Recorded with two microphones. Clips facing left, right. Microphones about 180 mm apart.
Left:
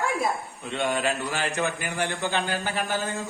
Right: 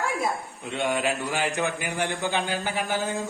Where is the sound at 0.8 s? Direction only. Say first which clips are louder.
Even; 15° right (ahead or behind).